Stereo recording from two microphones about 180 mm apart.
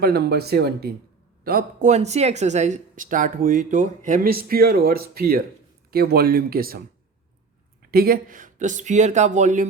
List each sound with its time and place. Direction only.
0.0 s speech: 60° right (ahead or behind)
1.5 s speech: 50° right (ahead or behind)